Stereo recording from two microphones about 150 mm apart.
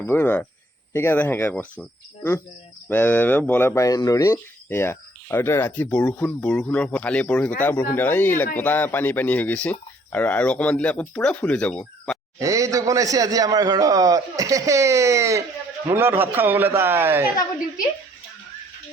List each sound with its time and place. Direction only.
0.0 s speech: 15° left (ahead or behind)
2.9 s speech: 10° left (ahead or behind)
12.4 s a man's voice: 20° right (ahead or behind)